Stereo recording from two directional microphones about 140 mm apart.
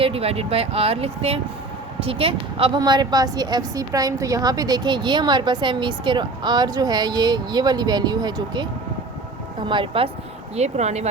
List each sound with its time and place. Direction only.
0.0 s a woman's voice: 45° right (ahead or behind)
10.5 s speech: 50° right (ahead or behind)